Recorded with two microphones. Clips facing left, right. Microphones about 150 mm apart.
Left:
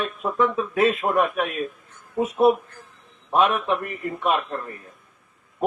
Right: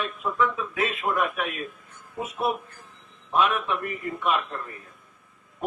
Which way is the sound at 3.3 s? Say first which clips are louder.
Left 4 dB; 35° left (ahead or behind).